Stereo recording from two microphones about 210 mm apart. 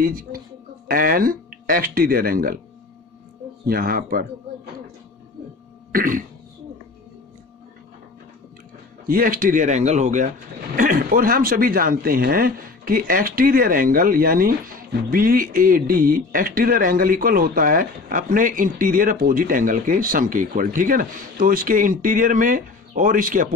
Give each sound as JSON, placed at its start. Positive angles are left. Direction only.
{"t": 0.0, "sound": "speech", "side_deg": -45}
{"t": 3.6, "sound": "speech", "side_deg": -45}
{"t": 5.9, "sound": "throat clearing", "side_deg": -40}
{"t": 9.0, "sound": "a man's voice", "side_deg": -45}